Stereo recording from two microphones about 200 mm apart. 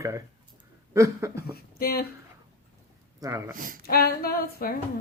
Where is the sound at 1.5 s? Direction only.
50° left (ahead or behind).